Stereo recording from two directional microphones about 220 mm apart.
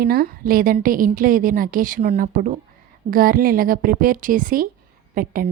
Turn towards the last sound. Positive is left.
turn(degrees=-40)  # may be behind; listen again after turning